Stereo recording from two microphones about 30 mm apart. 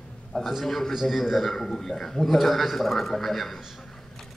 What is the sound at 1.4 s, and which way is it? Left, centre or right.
Speech, centre.